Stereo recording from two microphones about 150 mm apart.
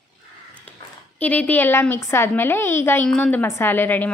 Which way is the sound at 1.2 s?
10° left (ahead or behind).